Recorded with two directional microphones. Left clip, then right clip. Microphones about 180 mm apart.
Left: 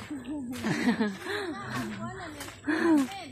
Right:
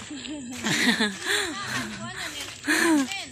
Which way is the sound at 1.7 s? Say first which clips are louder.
Right 5 dB; 20° right (ahead or behind).